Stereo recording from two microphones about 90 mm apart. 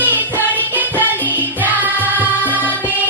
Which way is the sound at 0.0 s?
20° right (ahead or behind).